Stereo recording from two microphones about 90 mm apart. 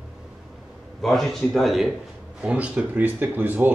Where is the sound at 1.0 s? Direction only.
5° left (ahead or behind).